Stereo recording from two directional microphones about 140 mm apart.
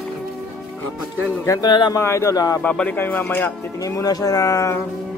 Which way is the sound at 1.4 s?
20° left (ahead or behind).